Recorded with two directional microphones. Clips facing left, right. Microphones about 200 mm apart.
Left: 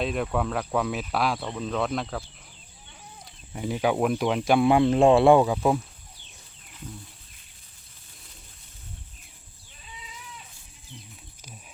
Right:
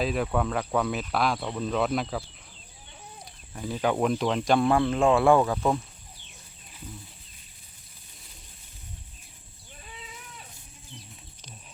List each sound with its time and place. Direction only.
0.0 s speech: centre (ahead or behind)
3.5 s speech: 15° left (ahead or behind)
9.8 s sheep: 55° right (ahead or behind)